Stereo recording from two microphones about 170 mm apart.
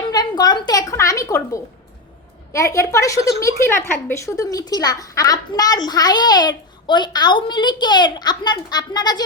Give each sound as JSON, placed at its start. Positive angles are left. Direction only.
{"t": 0.1, "sound": "a woman's voice", "side_deg": 25}